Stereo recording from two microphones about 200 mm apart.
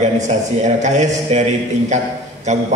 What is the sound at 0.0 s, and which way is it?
A man's voice, 35° right (ahead or behind).